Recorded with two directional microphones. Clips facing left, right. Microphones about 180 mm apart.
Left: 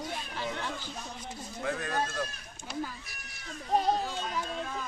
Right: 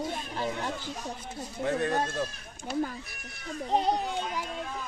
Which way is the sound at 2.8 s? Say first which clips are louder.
Right 6 dB; 50° right (ahead or behind).